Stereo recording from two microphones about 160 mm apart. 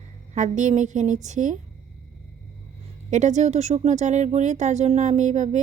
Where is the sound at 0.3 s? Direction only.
50° right (ahead or behind).